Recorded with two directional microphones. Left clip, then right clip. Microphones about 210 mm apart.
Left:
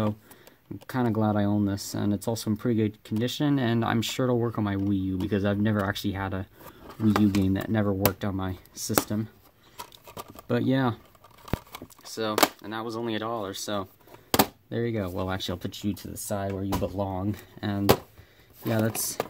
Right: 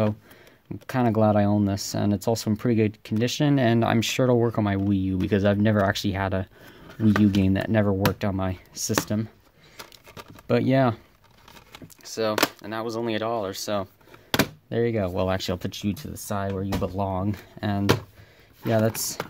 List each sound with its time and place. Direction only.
0.8 s speech: 40° right (ahead or behind)
7.4 s speech: 35° right (ahead or behind)
10.4 s speech: 35° right (ahead or behind)
12.0 s speech: 35° right (ahead or behind)